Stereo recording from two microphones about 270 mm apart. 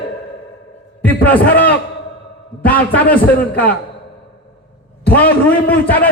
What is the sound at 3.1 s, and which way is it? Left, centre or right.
Speech, centre.